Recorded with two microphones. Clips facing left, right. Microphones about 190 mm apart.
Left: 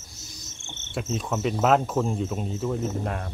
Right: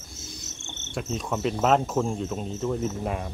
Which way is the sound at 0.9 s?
Centre (ahead or behind).